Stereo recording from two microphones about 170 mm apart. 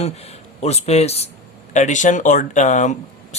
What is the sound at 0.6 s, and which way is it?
Speech, 40° left (ahead or behind).